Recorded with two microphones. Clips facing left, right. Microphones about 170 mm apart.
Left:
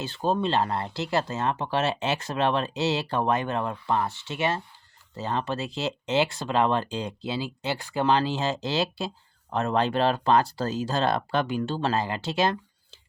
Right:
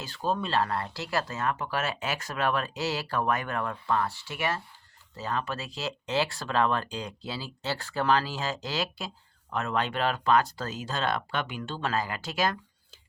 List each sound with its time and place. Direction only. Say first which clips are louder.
0.0 s speech: left 5 dB; 25° left (ahead or behind)